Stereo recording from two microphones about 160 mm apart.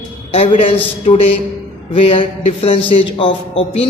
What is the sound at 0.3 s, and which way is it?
A man's voice, 35° left (ahead or behind).